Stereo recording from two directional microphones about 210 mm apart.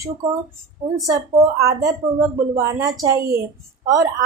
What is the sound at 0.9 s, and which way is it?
A woman's voice, 15° right (ahead or behind).